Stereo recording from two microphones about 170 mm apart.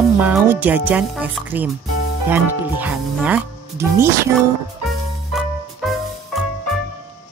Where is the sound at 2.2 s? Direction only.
10° right (ahead or behind).